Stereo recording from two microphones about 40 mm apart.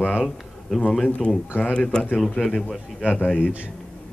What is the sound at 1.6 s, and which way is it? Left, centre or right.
Speech, left.